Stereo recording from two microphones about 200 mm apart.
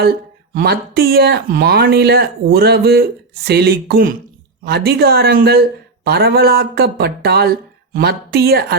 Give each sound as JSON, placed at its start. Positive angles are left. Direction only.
{"t": 0.5, "sound": "speech", "side_deg": -50}